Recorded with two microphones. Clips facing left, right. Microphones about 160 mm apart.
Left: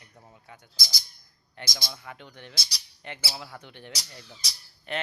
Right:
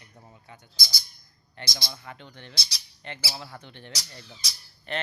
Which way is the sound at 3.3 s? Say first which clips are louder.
Even; 10° left (ahead or behind).